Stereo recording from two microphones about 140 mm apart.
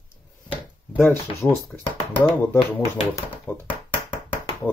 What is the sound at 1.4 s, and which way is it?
Speech, 10° left (ahead or behind).